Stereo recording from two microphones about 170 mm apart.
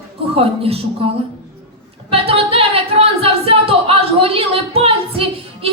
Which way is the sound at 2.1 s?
35° right (ahead or behind).